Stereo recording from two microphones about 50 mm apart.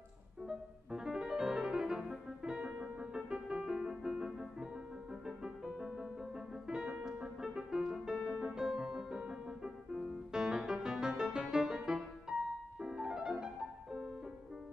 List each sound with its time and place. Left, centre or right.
0.5 s piano: centre
5.2 s music: centre